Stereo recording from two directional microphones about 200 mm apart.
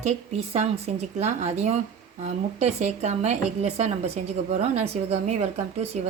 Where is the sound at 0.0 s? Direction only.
35° right (ahead or behind).